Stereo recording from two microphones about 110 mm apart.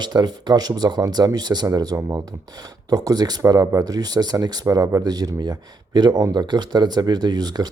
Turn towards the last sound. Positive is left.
turn(degrees=-40)  # may be behind; listen again after turning